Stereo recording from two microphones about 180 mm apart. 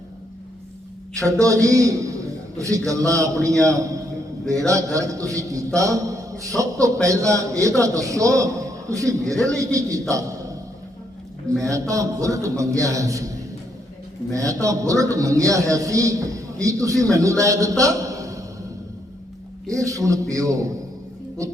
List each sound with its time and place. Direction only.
1.2 s a man's voice: 20° right (ahead or behind)
9.6 s a man's voice: 20° right (ahead or behind)
11.6 s a man's voice: 20° right (ahead or behind)
14.3 s a man's voice: 20° right (ahead or behind)
19.7 s a man's voice: 20° right (ahead or behind)